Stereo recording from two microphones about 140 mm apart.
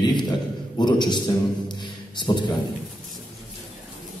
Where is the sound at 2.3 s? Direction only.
25° left (ahead or behind).